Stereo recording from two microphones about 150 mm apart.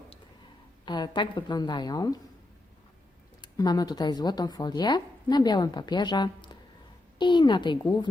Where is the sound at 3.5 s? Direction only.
25° left (ahead or behind).